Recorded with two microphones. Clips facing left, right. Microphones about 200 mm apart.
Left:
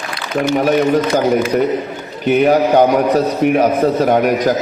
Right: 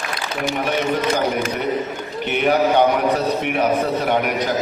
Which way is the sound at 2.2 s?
40° left (ahead or behind).